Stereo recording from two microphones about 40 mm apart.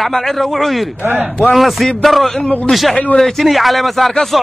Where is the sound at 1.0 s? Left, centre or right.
Right.